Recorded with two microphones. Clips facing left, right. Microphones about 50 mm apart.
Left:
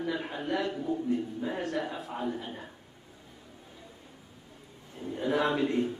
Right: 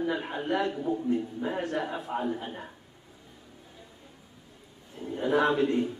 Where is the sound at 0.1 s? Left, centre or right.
Right.